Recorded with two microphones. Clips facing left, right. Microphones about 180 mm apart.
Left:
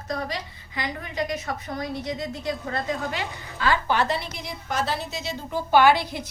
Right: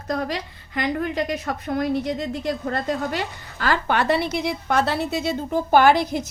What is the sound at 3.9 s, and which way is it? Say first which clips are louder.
A woman's voice: right 4 dB; 65° right (ahead or behind).